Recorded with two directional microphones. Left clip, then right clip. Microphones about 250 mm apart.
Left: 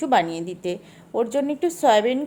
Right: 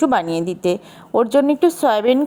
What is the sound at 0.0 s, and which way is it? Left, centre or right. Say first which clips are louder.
Speech: right 3 dB; right.